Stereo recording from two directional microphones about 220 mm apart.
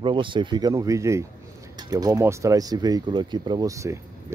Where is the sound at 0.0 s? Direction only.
20° right (ahead or behind).